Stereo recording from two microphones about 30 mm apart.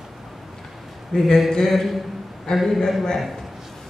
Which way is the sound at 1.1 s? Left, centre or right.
Left.